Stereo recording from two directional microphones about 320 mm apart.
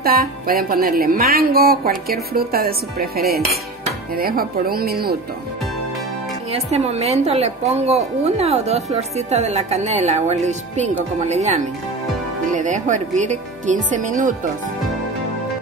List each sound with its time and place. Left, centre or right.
0.0 s a woman's voice: right
6.5 s a woman's voice: centre